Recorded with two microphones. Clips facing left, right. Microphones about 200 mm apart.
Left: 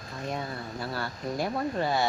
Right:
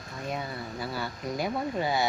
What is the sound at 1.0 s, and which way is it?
Speech, centre (ahead or behind).